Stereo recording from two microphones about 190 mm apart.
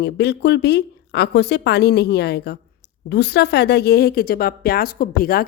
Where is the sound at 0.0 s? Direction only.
60° left (ahead or behind).